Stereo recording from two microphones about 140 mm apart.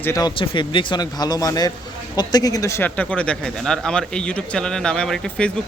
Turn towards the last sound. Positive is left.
turn(degrees=5)  # may be behind; listen again after turning